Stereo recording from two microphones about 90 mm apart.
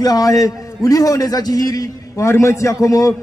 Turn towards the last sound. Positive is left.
turn(degrees=40)  # may be behind; listen again after turning